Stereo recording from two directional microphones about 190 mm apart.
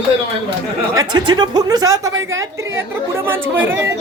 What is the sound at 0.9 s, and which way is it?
Speech, 20° right (ahead or behind).